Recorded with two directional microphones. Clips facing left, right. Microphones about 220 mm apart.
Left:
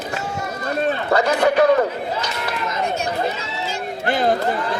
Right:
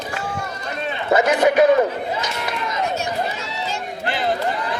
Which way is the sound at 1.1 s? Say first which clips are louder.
Right 2 dB; 20° right (ahead or behind).